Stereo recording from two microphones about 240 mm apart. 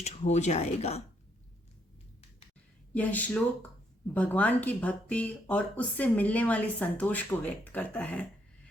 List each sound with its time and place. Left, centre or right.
0.0 s speech: left
2.9 s speech: centre